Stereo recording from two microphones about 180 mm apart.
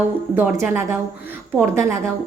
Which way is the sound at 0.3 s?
10° right (ahead or behind).